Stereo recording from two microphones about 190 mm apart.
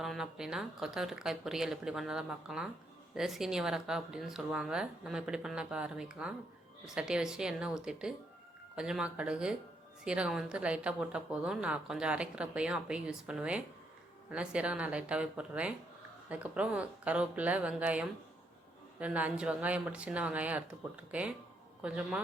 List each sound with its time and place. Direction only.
0.0 s a woman's voice: centre (ahead or behind)